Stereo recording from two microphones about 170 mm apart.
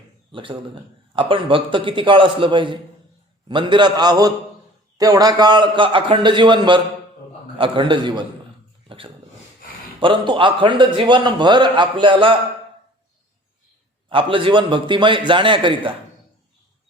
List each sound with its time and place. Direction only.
0.3 s a man's voice: 30° right (ahead or behind)
10.0 s a man's voice: 30° right (ahead or behind)
14.1 s a man's voice: 30° right (ahead or behind)